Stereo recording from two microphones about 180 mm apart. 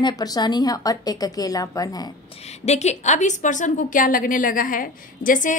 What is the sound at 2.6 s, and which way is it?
A woman's voice, 40° left (ahead or behind).